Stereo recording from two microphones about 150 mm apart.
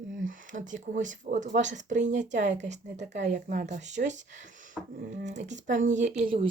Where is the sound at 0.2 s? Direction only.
60° right (ahead or behind).